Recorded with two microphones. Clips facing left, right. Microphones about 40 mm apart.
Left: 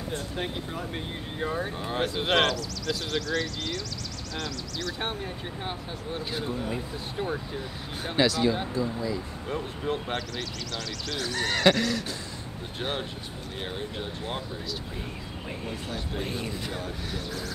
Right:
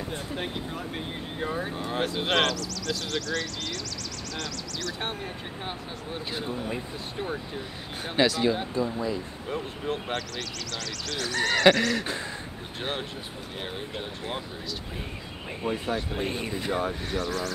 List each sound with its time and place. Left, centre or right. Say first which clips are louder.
0.4 s speech: even; centre
9.5 s speech: left 1 dB; centre
11.9 s speech: right 2 dB; right
13.6 s speech: left 1 dB; centre
15.6 s speech: right 9 dB; right
17.1 s speech: right 5 dB; centre